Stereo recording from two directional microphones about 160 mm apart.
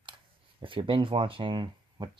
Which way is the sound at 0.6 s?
30° right (ahead or behind).